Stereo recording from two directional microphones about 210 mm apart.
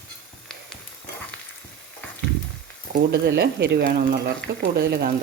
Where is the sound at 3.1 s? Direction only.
50° right (ahead or behind).